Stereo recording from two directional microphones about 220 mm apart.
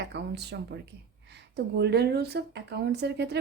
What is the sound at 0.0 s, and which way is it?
Speech, 50° right (ahead or behind).